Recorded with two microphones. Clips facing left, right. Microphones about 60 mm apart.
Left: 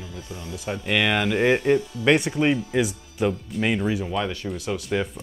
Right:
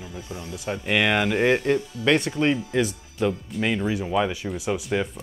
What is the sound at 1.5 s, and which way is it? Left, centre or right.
Speech, centre.